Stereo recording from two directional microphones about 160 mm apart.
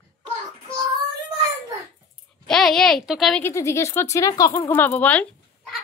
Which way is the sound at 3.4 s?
20° left (ahead or behind).